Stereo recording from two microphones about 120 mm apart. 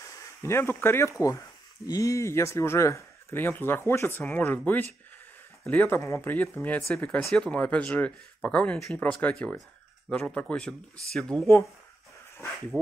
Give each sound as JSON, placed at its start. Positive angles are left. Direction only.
{"t": 0.0, "sound": "speech", "side_deg": 25}